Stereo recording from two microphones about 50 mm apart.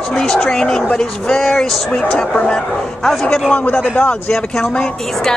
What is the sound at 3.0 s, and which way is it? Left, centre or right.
Speech, centre.